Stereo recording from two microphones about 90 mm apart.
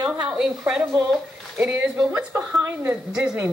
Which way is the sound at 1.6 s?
20° right (ahead or behind).